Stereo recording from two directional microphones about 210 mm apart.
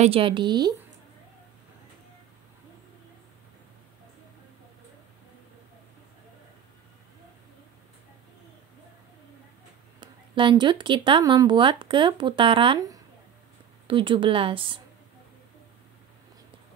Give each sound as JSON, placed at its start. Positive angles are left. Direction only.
{"t": 0.0, "sound": "speech", "side_deg": -25}
{"t": 9.9, "sound": "speech", "side_deg": -20}